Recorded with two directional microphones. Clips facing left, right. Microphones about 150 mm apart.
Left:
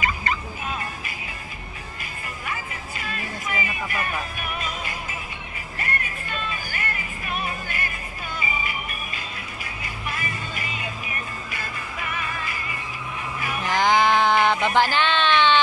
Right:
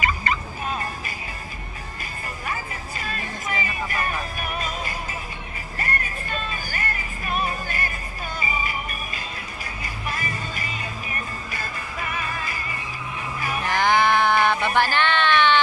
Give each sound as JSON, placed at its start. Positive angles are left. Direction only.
{"t": 0.7, "sound": "music", "side_deg": -40}
{"t": 2.4, "sound": "music", "side_deg": -40}
{"t": 13.7, "sound": "a sound", "side_deg": 20}